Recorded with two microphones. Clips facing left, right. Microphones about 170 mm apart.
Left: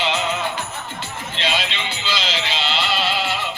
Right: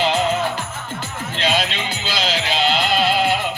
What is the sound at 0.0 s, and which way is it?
Music, 45° right (ahead or behind).